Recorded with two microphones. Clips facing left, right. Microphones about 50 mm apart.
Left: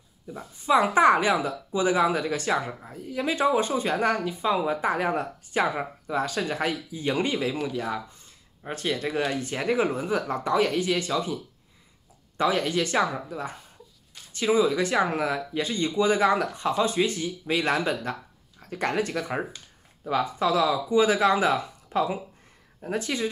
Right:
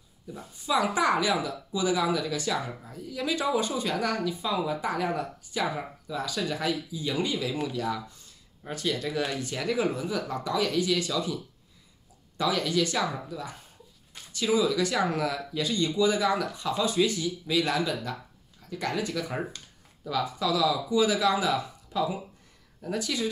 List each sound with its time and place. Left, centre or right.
0.3 s speech: left
12.4 s speech: left